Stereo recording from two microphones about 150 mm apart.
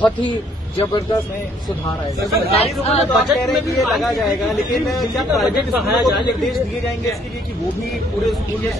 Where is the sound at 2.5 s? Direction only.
45° left (ahead or behind).